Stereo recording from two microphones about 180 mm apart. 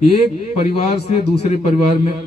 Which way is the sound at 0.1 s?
35° left (ahead or behind).